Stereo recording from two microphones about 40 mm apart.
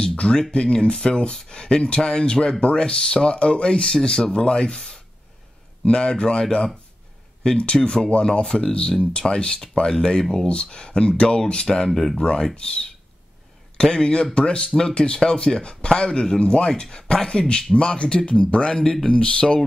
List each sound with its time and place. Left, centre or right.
0.0 s speech: left
7.4 s speech: left
11.9 s speech: centre
12.2 s speech: centre